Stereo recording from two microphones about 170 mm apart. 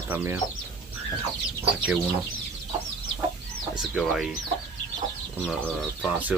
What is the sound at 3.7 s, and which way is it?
Chicken, 5° right (ahead or behind).